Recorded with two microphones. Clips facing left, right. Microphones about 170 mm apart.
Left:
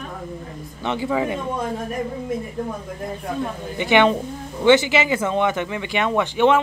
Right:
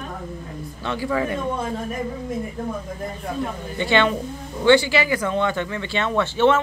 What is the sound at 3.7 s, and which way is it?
Speech, 15° left (ahead or behind).